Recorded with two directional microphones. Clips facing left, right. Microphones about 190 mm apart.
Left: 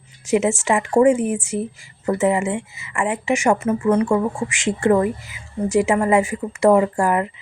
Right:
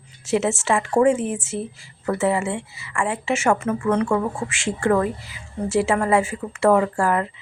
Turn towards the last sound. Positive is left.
turn(degrees=15)  # may be behind; listen again after turning